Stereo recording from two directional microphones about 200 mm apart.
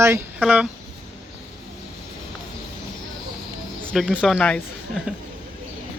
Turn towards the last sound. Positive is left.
turn(degrees=5)  # may be behind; listen again after turning